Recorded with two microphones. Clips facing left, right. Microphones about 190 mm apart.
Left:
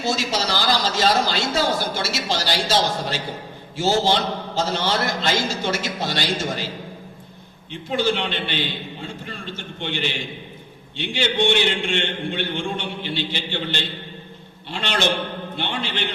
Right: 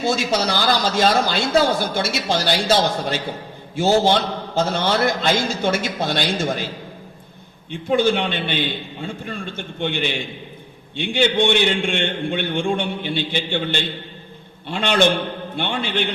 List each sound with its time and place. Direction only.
0.0 s speech: 55° right (ahead or behind)
7.7 s speech: 55° right (ahead or behind)